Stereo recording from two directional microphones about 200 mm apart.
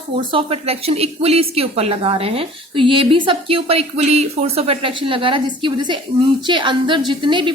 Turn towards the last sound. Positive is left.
turn(degrees=-25)  # may be behind; listen again after turning